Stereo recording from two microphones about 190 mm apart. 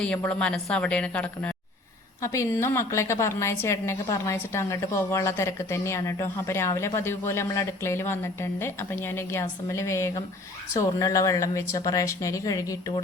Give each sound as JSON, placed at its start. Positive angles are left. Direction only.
{"t": 0.0, "sound": "a woman's voice", "side_deg": 5}